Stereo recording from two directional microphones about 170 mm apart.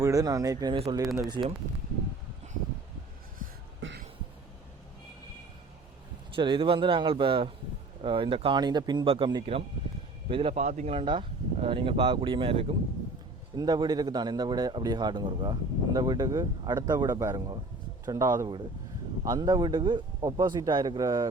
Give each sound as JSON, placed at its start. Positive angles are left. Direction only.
{"t": 0.0, "sound": "a man's voice", "side_deg": -20}
{"t": 3.8, "sound": "a sound", "side_deg": -90}
{"t": 6.3, "sound": "speech", "side_deg": -30}
{"t": 13.6, "sound": "a man's voice", "side_deg": -25}